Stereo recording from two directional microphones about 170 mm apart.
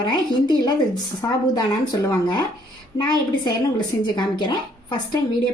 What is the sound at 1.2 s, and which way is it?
A woman's voice, 20° left (ahead or behind).